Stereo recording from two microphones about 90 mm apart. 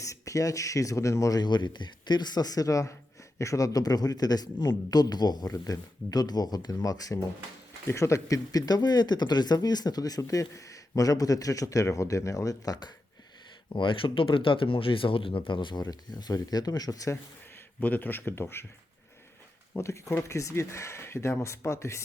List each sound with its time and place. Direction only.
0.0 s speech: 35° left (ahead or behind)
7.9 s speech: 30° left (ahead or behind)
13.7 s speech: 70° left (ahead or behind); by 17.2 s 40° left (ahead or behind)
17.7 s speech: 20° left (ahead or behind)
19.7 s speech: 30° left (ahead or behind)